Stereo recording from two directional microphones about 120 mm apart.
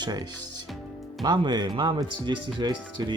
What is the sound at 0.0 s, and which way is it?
Speech, 35° right (ahead or behind).